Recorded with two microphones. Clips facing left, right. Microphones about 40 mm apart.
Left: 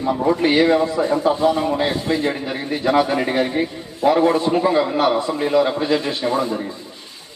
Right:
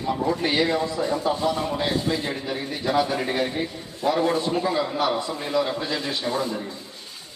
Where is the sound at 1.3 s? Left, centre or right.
Left.